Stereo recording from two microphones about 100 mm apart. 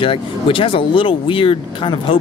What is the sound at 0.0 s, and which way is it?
A man's voice, 60° left (ahead or behind).